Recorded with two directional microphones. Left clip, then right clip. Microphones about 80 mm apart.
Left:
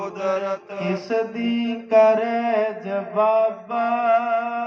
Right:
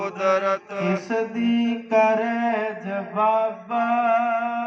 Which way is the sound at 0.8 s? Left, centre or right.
Centre.